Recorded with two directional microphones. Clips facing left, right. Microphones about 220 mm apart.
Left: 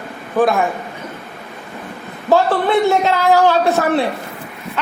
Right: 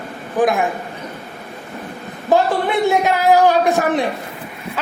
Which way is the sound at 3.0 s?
15° right (ahead or behind).